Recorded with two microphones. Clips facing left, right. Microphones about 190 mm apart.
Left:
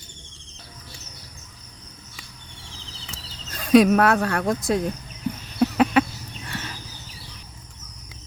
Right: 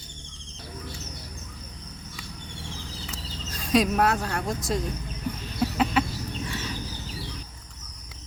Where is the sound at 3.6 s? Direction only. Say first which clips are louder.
Left 7 dB; 60° left (ahead or behind).